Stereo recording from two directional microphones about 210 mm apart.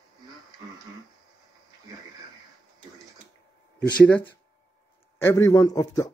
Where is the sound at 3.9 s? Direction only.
5° left (ahead or behind).